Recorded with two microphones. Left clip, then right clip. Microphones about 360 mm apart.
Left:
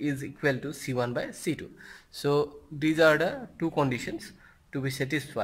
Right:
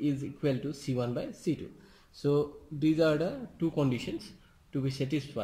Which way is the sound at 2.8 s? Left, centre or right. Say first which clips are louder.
Left 5 dB; left.